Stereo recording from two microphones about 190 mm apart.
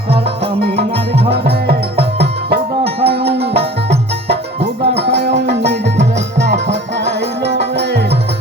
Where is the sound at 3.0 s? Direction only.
60° right (ahead or behind).